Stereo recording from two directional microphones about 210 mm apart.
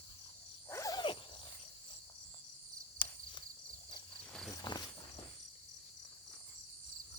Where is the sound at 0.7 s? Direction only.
15° left (ahead or behind).